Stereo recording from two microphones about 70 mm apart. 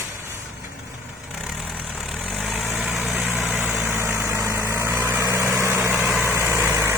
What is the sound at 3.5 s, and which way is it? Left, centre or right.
Vehicle, right.